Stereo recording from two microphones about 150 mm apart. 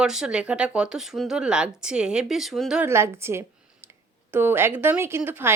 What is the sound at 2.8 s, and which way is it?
Speech, 15° right (ahead or behind).